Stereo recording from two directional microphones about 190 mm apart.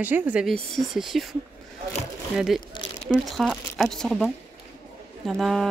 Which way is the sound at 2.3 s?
Centre (ahead or behind).